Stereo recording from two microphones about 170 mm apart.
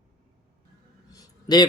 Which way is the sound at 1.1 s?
25° left (ahead or behind).